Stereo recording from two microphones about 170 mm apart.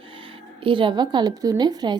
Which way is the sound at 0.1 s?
30° right (ahead or behind).